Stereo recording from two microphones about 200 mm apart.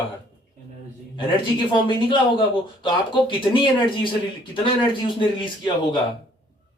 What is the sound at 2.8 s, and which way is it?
Speech, 25° left (ahead or behind).